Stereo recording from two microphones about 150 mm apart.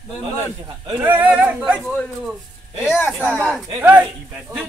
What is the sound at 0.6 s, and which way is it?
Speech, 25° right (ahead or behind).